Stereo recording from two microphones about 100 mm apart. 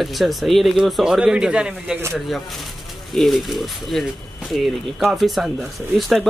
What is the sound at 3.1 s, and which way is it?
Speech, centre (ahead or behind).